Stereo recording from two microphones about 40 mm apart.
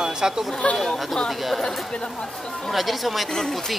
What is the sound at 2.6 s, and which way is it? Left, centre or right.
Speech, centre.